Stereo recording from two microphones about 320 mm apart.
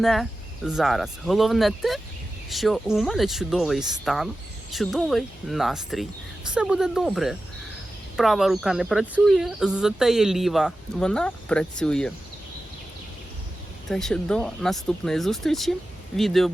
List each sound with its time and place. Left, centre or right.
0.0 s speech: centre
13.9 s speech: centre